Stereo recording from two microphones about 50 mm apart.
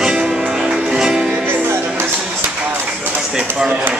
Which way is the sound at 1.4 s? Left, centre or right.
Right.